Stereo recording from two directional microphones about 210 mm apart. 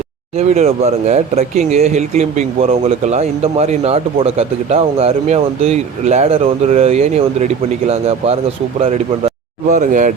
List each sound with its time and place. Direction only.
0.3 s speech: 30° right (ahead or behind)
9.6 s speech: 35° right (ahead or behind)